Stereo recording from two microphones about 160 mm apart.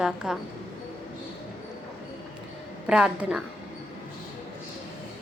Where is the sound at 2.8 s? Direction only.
5° right (ahead or behind).